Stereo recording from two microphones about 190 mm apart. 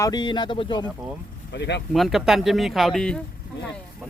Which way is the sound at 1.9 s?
Centre (ahead or behind).